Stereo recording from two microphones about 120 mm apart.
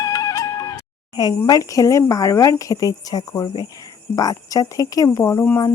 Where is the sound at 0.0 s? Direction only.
30° left (ahead or behind).